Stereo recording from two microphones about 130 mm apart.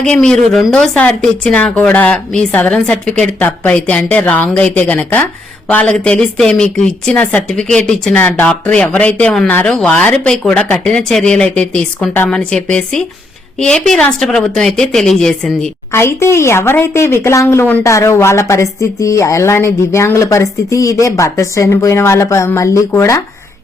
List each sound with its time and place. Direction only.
0.0 s a woman's voice: 5° left (ahead or behind)
15.9 s speech: 20° left (ahead or behind)